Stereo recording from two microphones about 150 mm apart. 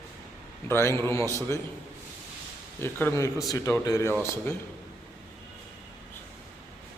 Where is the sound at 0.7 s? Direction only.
15° left (ahead or behind).